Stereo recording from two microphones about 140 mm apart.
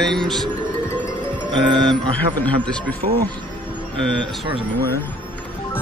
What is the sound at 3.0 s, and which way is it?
Speech, 70° right (ahead or behind).